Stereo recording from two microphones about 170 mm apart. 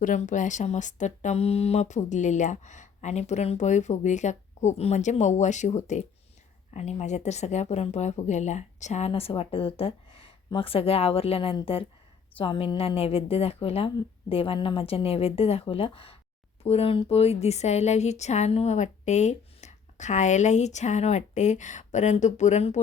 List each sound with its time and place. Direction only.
0.0 s a woman's voice: 50° left (ahead or behind)